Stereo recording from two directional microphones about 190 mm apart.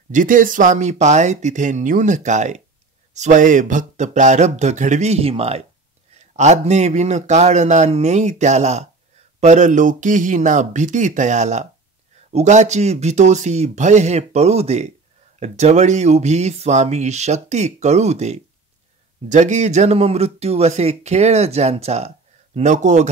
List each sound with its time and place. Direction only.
0.1 s speech: 45° right (ahead or behind)